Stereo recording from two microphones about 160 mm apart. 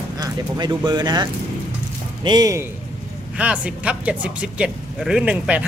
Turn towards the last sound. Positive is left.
turn(degrees=-5)  # may be behind; listen again after turning